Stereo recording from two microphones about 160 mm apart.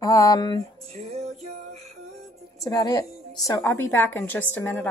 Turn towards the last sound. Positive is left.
turn(degrees=10)  # may be behind; listen again after turning